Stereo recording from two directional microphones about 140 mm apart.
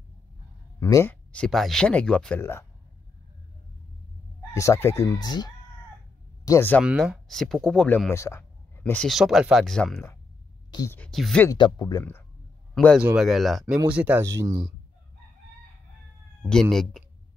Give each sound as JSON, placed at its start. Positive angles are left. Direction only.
{"t": 0.7, "sound": "speech", "side_deg": 20}
{"t": 1.3, "sound": "speech", "side_deg": 5}
{"t": 4.6, "sound": "speech", "side_deg": 20}
{"t": 5.2, "sound": "speech", "side_deg": 30}
{"t": 6.8, "sound": "speech", "side_deg": -5}
{"t": 8.1, "sound": "a sound", "side_deg": 20}
{"t": 9.0, "sound": "speech", "side_deg": 0}
{"t": 11.5, "sound": "speech", "side_deg": 30}
{"t": 12.0, "sound": "speech", "side_deg": 15}
{"t": 12.7, "sound": "a man's voice", "side_deg": 5}
{"t": 13.8, "sound": "speech", "side_deg": -10}
{"t": 16.4, "sound": "speech", "side_deg": 5}